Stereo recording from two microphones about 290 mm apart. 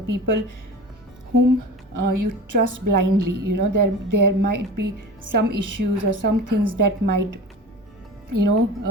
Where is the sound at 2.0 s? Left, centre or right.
Right.